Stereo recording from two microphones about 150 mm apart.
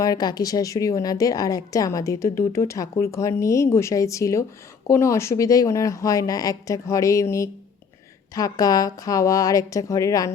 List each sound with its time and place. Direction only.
0.0 s speech: 25° left (ahead or behind)